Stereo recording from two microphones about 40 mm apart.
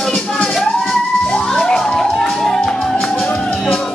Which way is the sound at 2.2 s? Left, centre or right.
Centre.